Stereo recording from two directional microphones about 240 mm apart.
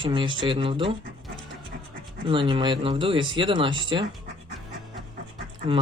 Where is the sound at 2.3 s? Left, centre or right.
Right.